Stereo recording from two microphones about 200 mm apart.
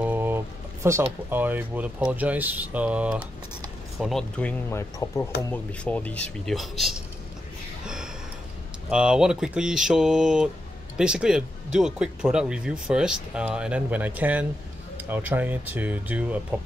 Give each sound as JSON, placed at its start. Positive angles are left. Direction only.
{"t": 0.0, "sound": "a sound", "side_deg": -10}
{"t": 0.8, "sound": "speech", "side_deg": -10}
{"t": 7.8, "sound": "gasp", "side_deg": -5}
{"t": 8.9, "sound": "speech", "side_deg": -5}